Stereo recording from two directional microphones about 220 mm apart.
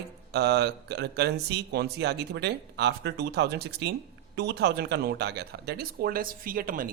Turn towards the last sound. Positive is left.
turn(degrees=-40)  # may be behind; listen again after turning